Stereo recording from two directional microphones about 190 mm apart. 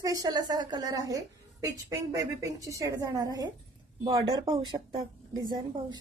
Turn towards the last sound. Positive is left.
turn(degrees=-20)  # may be behind; listen again after turning